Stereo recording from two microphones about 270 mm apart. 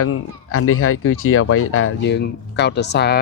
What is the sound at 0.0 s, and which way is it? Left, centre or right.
Speech, left.